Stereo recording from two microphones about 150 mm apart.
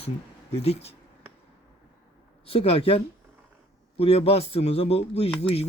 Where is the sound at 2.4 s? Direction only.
40° left (ahead or behind).